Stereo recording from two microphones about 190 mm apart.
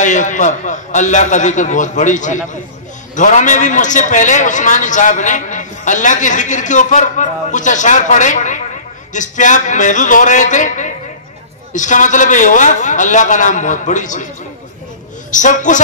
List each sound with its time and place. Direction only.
0.0 s a man's voice: 40° left (ahead or behind)
15.3 s a man's voice: 40° left (ahead or behind)